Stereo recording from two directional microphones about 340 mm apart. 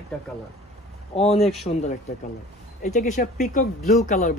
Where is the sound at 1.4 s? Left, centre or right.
Centre.